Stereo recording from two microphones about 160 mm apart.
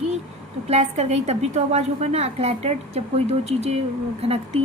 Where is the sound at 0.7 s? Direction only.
45° right (ahead or behind).